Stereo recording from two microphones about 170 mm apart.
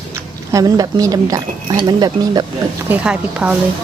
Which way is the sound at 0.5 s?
20° right (ahead or behind).